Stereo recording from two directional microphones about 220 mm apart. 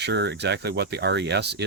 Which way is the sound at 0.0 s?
50° right (ahead or behind).